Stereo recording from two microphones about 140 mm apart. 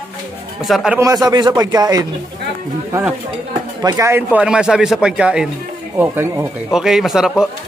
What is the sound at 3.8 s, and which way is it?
Speech, 25° right (ahead or behind).